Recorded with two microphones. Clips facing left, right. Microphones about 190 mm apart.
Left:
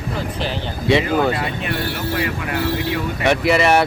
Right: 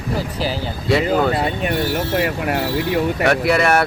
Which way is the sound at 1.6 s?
45° right (ahead or behind).